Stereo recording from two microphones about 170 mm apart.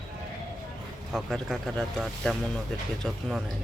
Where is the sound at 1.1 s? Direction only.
Centre (ahead or behind).